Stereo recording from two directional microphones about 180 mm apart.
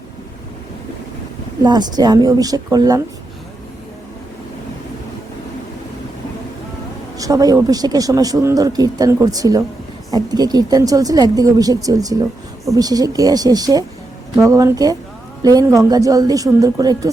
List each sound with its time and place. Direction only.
1.6 s speech: 20° right (ahead or behind)
7.2 s speech: 20° right (ahead or behind)